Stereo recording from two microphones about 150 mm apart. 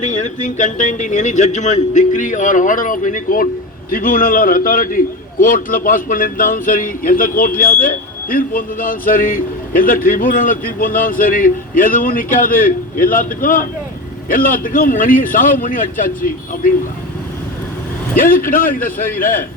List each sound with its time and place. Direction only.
0.0 s a man's voice: 55° left (ahead or behind); by 16.7 s 70° left (ahead or behind)
18.2 s a man's voice: 70° left (ahead or behind)